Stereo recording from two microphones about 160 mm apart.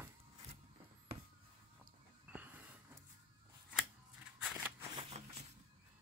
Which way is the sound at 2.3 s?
10° right (ahead or behind).